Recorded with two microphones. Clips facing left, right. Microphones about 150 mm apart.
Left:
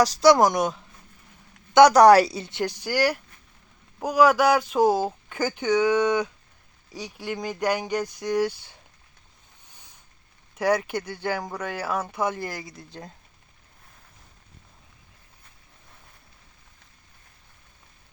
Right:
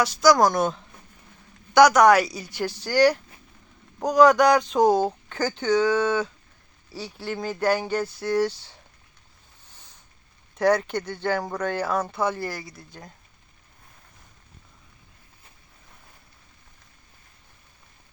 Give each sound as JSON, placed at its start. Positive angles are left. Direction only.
{"t": 0.0, "sound": "a woman's voice", "side_deg": 35}
{"t": 1.7, "sound": "a woman's voice", "side_deg": 30}
{"t": 4.0, "sound": "a sound", "side_deg": 5}
{"t": 5.3, "sound": "speech", "side_deg": 10}
{"t": 9.7, "sound": "a sound", "side_deg": 15}
{"t": 10.5, "sound": "a woman's voice", "side_deg": 10}